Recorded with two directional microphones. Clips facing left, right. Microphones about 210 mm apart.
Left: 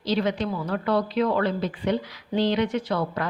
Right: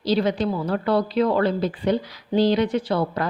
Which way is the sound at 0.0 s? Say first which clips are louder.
Right 3 dB; 35° right (ahead or behind).